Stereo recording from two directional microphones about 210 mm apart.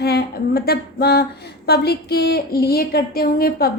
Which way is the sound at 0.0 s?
50° left (ahead or behind).